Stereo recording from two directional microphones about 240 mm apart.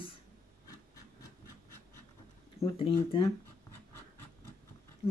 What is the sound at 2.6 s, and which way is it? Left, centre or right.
Speech, left.